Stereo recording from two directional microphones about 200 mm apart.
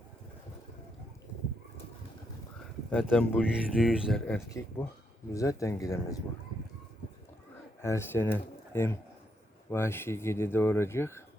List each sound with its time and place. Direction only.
2.9 s speech: 5° left (ahead or behind)
4.4 s speech: 15° left (ahead or behind)
7.8 s speech: 15° left (ahead or behind)